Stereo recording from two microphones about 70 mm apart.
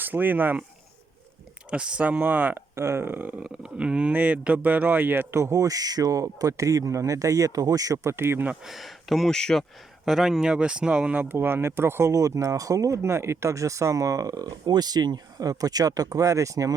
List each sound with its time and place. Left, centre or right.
0.0 s speech: right
1.7 s a man's voice: centre
2.7 s speech: right
3.4 s speech: centre
4.1 s a man's voice: right
5.5 s speech: right
8.1 s speech: right
8.6 s speech: centre
10.1 s speech: centre; by 11.3 s right
11.3 s speech: right